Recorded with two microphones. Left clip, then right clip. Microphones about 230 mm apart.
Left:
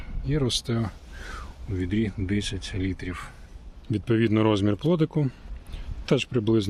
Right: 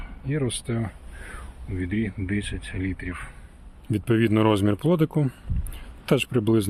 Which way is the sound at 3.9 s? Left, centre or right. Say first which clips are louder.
Right 1 dB; centre.